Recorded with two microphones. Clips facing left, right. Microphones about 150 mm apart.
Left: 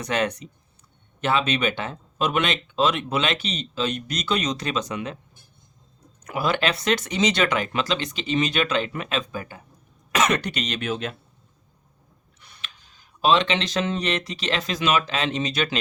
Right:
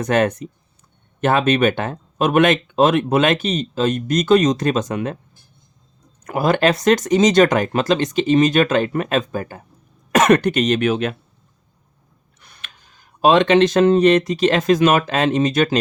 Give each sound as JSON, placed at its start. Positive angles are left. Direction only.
{"t": 0.0, "sound": "speech", "side_deg": -50}
{"t": 6.2, "sound": "speech", "side_deg": -45}
{"t": 12.4, "sound": "speech", "side_deg": -55}